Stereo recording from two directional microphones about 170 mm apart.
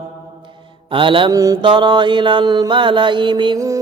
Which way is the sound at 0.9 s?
30° right (ahead or behind).